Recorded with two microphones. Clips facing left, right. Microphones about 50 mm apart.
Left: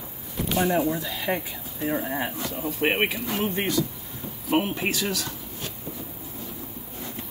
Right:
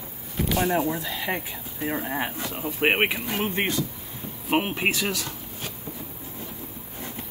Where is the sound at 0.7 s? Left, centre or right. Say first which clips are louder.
Left 1 dB; right.